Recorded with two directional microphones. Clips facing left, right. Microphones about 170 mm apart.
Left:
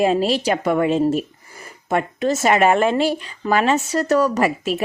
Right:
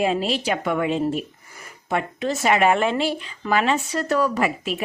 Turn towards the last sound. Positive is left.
turn(degrees=40)  # may be behind; listen again after turning